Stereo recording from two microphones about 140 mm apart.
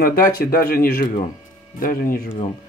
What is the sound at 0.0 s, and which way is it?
Speech, 90° left.